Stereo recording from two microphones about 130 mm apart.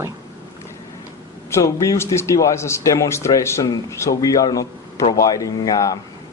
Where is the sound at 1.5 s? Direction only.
25° left (ahead or behind).